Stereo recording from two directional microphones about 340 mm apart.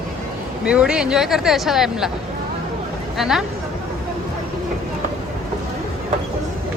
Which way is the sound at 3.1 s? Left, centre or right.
Centre.